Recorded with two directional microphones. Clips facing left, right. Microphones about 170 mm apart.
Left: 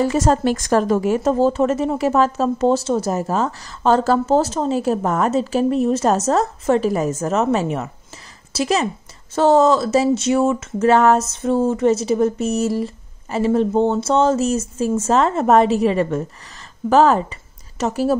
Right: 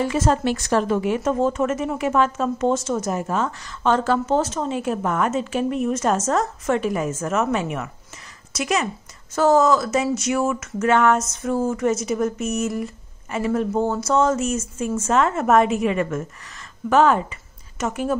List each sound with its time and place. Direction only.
0.0 s speech: 40° left (ahead or behind)